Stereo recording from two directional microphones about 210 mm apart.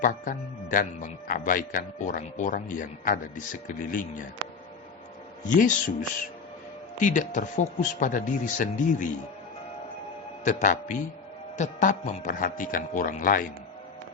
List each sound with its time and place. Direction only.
0.0 s speech: 40° left (ahead or behind)
5.5 s speech: 40° left (ahead or behind)
10.4 s speech: 35° left (ahead or behind)